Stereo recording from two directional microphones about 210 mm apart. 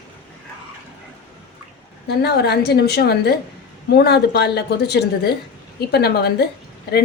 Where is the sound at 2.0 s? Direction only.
50° left (ahead or behind).